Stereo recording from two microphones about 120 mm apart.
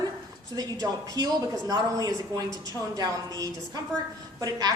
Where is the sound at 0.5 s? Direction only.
30° right (ahead or behind).